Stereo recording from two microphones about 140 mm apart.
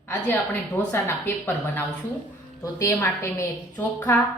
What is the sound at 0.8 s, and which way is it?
A woman's voice, 15° left (ahead or behind).